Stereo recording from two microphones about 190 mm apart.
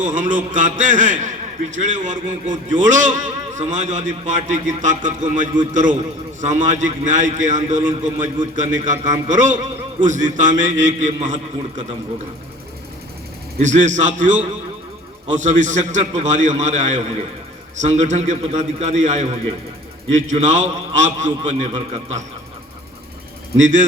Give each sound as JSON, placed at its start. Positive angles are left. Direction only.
{"t": 0.0, "sound": "a man's voice", "side_deg": -40}
{"t": 13.6, "sound": "a man's voice", "side_deg": -40}
{"t": 23.6, "sound": "a man's voice", "side_deg": -40}